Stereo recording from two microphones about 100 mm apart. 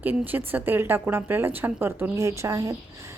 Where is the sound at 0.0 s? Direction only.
20° right (ahead or behind).